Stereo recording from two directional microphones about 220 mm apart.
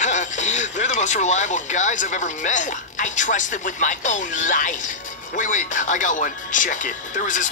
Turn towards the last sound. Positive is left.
turn(degrees=35)  # may be behind; listen again after turning